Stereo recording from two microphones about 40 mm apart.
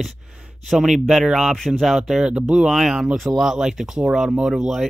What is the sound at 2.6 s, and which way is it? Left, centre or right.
Speech, centre.